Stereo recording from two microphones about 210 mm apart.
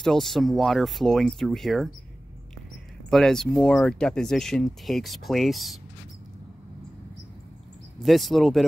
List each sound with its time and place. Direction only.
0.0 s speech: centre (ahead or behind)
3.1 s speech: centre (ahead or behind)
8.0 s speech: centre (ahead or behind)